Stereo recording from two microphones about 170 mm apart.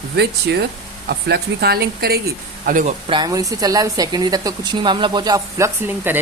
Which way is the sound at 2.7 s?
50° right (ahead or behind).